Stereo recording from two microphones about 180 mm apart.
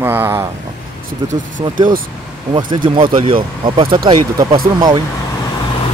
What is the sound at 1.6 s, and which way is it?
Speech, 25° right (ahead or behind).